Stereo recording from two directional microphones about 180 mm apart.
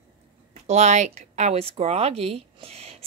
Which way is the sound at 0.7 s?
40° right (ahead or behind).